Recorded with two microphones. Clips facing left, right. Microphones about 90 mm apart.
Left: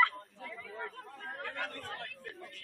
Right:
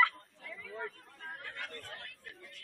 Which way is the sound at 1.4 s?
50° left (ahead or behind).